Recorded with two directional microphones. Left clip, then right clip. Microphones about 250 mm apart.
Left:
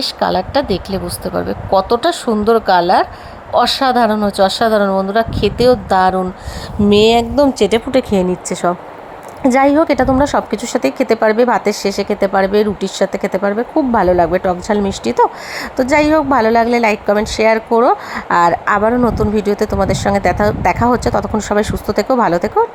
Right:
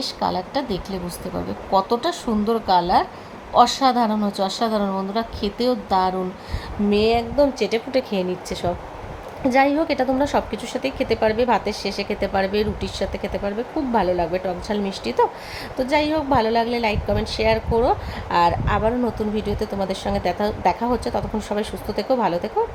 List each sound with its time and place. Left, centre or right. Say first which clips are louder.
0.0 s a woman's voice: left 8 dB; left